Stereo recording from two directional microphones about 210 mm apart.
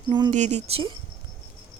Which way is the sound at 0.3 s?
35° right (ahead or behind).